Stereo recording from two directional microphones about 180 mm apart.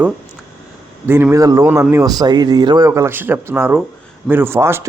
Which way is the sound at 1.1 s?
15° right (ahead or behind).